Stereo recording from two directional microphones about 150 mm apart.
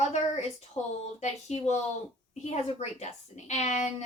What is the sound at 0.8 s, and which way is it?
Speech, 15° left (ahead or behind).